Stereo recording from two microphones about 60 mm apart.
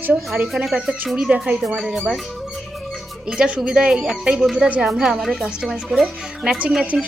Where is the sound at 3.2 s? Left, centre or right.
Centre.